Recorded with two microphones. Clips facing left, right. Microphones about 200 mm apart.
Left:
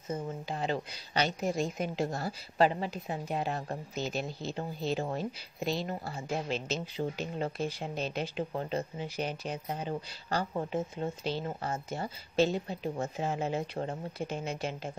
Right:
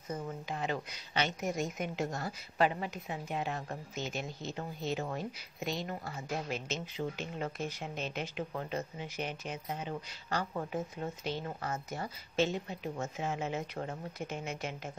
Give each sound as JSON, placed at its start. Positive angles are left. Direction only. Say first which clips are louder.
{"t": 0.1, "sound": "a woman's voice", "louder": "left 3 dB", "side_deg": 30}